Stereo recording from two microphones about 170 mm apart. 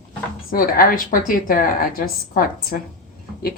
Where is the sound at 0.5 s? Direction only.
60° left (ahead or behind).